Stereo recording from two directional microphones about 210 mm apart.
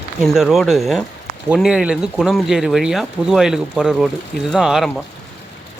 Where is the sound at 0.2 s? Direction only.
Centre (ahead or behind).